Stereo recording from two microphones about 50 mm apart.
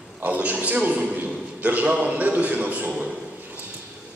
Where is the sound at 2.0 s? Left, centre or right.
Right.